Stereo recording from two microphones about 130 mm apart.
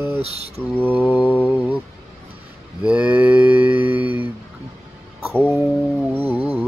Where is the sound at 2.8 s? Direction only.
10° right (ahead or behind).